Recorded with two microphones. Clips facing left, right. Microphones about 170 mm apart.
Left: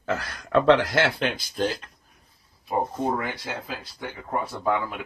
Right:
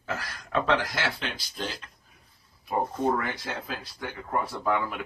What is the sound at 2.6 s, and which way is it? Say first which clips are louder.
Speech: left 1 dB; 15° left (ahead or behind).